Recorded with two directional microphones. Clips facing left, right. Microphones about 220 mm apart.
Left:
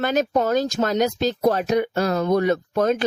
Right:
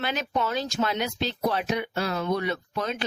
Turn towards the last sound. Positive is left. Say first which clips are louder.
# left 10 dB
turn(degrees=45)  # may be behind; listen again after turning